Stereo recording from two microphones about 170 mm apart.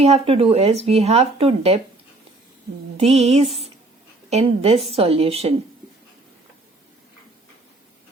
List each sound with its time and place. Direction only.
0.0 s speech: 35° right (ahead or behind)
3.0 s speech: 40° right (ahead or behind)